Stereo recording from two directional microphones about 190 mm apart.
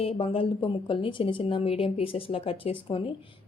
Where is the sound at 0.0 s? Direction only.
30° left (ahead or behind).